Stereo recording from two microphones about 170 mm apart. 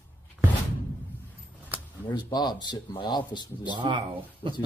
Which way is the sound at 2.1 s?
25° left (ahead or behind).